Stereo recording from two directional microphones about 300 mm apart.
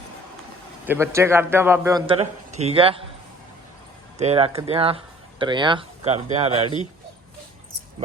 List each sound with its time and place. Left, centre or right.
0.9 s a man's voice: centre
4.2 s speech: centre